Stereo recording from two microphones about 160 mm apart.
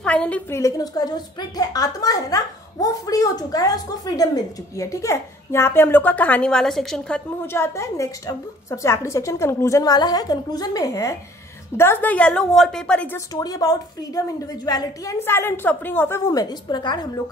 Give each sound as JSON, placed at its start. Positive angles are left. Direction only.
{"t": 0.0, "sound": "a sound", "side_deg": 10}
{"t": 0.6, "sound": "a woman's voice", "side_deg": 20}
{"t": 7.4, "sound": "a woman's voice", "side_deg": 15}
{"t": 13.3, "sound": "a woman's voice", "side_deg": 25}